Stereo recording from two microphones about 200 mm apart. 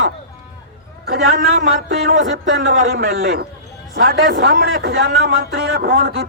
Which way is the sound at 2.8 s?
50° right (ahead or behind).